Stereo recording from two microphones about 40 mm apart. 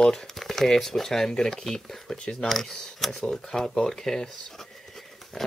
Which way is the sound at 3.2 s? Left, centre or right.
Centre.